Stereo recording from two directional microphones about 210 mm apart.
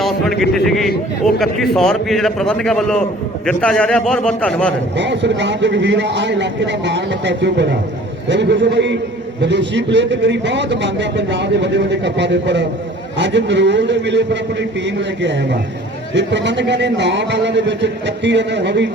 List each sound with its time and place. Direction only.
0.0 s a man's voice: centre (ahead or behind)
4.9 s a man's voice: 55° right (ahead or behind)